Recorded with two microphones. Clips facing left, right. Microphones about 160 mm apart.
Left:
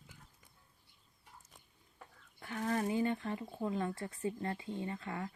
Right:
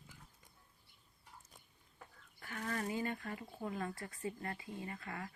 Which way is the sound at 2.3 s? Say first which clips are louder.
Left 6 dB; 25° left (ahead or behind).